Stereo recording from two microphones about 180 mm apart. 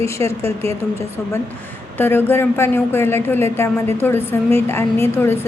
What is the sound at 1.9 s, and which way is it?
Speech, 10° left (ahead or behind).